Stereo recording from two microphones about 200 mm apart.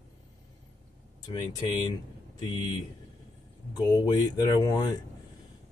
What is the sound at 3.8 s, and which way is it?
Speech, 20° left (ahead or behind).